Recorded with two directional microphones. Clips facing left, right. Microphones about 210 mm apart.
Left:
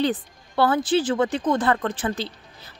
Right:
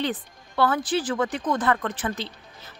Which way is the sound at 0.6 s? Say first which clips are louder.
Left 3 dB; 25° left (ahead or behind).